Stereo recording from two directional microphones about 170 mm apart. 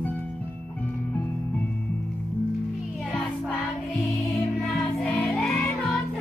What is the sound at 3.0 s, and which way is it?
Music, centre (ahead or behind).